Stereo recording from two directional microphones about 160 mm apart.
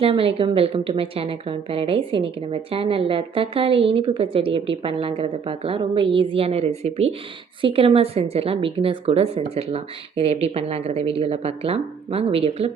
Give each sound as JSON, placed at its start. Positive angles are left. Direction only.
{"t": 0.0, "sound": "a woman's voice", "side_deg": -35}